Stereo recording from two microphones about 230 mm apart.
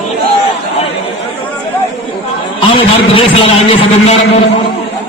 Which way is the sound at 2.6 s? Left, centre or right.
Left.